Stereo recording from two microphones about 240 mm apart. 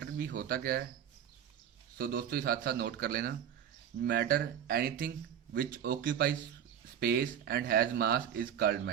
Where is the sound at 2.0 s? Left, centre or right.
Right.